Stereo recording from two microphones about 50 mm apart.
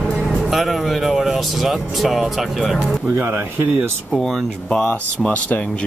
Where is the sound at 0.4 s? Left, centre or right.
Centre.